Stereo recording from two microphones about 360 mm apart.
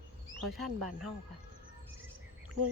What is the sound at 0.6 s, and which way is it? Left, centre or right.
Speech, right.